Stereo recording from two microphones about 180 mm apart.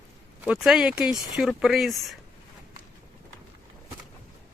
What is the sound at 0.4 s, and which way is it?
Speech, 5° right (ahead or behind).